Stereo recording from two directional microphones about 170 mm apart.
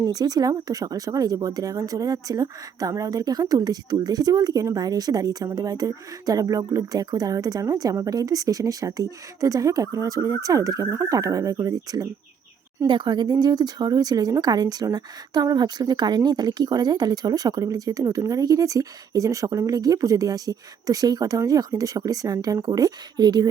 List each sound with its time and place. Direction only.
0.0 s speech: 20° right (ahead or behind)